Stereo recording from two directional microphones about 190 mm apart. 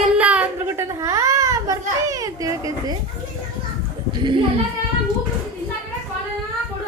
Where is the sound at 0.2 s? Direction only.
5° right (ahead or behind).